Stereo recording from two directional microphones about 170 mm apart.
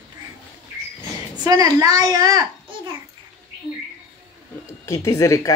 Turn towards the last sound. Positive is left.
turn(degrees=20)  # may be behind; listen again after turning